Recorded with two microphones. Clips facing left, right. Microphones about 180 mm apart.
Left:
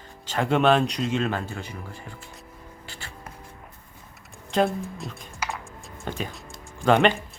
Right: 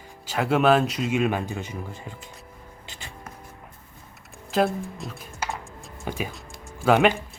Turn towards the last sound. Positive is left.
turn(degrees=-5)  # may be behind; listen again after turning